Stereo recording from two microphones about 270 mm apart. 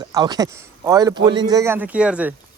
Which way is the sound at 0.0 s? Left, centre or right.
Centre.